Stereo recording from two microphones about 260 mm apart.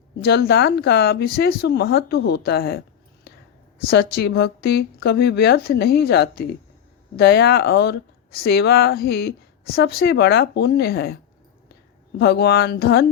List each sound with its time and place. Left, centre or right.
0.2 s speech: left
3.8 s speech: left
12.2 s speech: left